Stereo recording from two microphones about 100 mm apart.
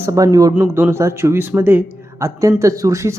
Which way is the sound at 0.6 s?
25° right (ahead or behind).